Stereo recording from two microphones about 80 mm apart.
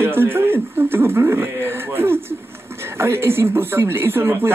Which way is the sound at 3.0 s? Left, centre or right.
Right.